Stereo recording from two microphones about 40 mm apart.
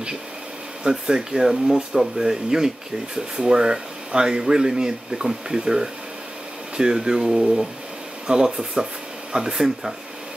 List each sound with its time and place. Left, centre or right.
0.8 s speech: centre